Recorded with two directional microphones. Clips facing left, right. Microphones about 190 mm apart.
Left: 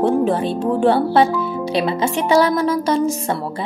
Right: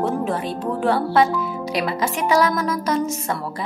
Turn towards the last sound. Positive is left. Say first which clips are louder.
# left 5 dB
turn(degrees=30)  # may be behind; listen again after turning